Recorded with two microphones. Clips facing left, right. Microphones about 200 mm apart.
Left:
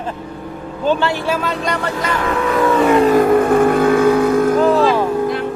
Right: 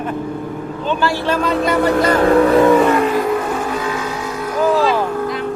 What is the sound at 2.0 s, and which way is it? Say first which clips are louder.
Speech: right 9 dB; 35° right (ahead or behind).